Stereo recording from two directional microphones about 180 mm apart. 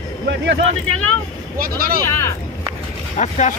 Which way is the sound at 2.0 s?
15° left (ahead or behind).